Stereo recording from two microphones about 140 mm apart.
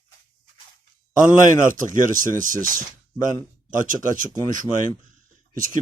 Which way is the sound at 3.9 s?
70° right (ahead or behind).